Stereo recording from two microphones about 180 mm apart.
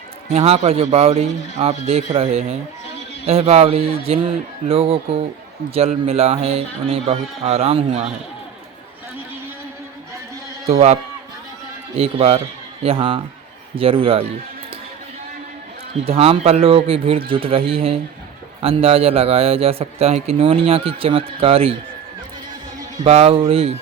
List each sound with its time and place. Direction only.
0.3 s a man's voice: 35° right (ahead or behind)
10.7 s a man's voice: 35° right (ahead or behind)
11.9 s a man's voice: 35° right (ahead or behind)
16.0 s a man's voice: 35° right (ahead or behind)
23.0 s a man's voice: 35° right (ahead or behind)